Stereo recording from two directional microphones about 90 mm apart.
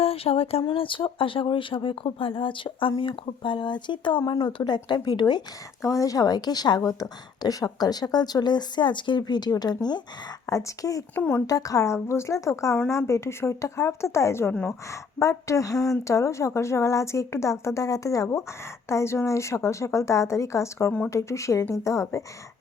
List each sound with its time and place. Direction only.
0.0 s speech: 90° left
0.6 s a woman's voice: 70° left (ahead or behind); by 5.4 s 50° left (ahead or behind)
5.8 s a woman's voice: 35° left (ahead or behind)
10.4 s speech: 35° left (ahead or behind)
11.1 s speech: 20° left (ahead or behind)
11.4 s speech: 40° left (ahead or behind)